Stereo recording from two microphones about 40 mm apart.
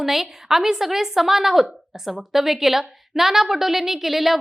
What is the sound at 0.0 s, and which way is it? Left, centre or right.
A woman's voice, centre.